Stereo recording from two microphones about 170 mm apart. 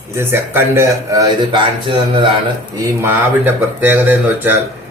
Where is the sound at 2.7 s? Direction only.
15° right (ahead or behind).